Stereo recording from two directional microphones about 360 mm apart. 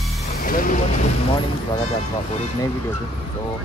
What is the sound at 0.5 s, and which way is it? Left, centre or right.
Vehicle, left.